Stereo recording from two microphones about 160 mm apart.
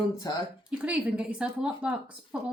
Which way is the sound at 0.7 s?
5° right (ahead or behind).